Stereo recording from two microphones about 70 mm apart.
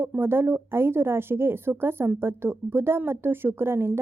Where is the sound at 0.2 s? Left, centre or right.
Right.